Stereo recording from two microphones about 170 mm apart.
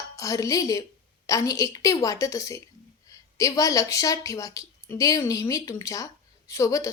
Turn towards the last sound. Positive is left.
turn(degrees=20)  # may be behind; listen again after turning